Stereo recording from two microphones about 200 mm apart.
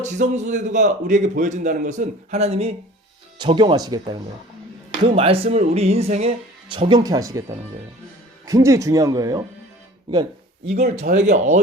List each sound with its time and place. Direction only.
0.0 s a man's voice: 35° right (ahead or behind); by 9.4 s 20° right (ahead or behind)
11.0 s a man's voice: 35° right (ahead or behind)